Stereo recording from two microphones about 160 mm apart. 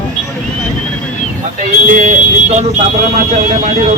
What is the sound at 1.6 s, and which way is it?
Speech, 50° right (ahead or behind).